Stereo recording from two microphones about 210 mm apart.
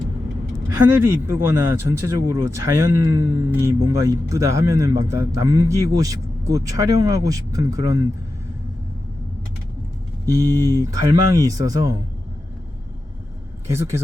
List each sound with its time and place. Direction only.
0.9 s speech: 10° right (ahead or behind)
10.2 s speech: 15° right (ahead or behind)
13.7 s speech: 10° right (ahead or behind)